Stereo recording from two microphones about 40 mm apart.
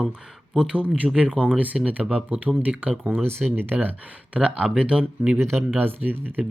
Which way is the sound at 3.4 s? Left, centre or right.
Right.